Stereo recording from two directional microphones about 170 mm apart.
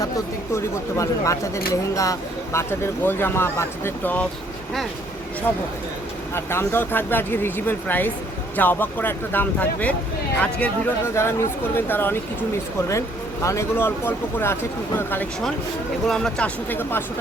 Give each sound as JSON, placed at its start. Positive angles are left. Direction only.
{"t": 0.5, "sound": "speech", "side_deg": 15}
{"t": 6.3, "sound": "speech", "side_deg": 15}
{"t": 13.4, "sound": "speech", "side_deg": 15}